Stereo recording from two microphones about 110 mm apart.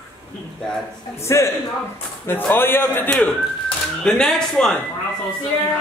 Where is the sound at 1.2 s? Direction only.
25° left (ahead or behind).